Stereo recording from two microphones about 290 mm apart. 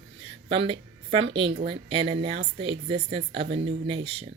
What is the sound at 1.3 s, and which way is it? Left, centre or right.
Speech, centre.